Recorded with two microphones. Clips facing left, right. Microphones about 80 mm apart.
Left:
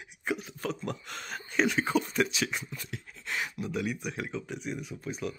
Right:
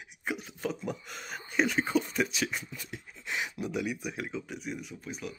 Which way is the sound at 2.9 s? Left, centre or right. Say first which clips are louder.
Even; centre.